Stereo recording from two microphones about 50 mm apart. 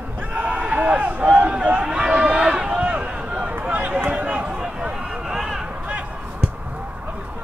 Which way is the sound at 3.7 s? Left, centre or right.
Right.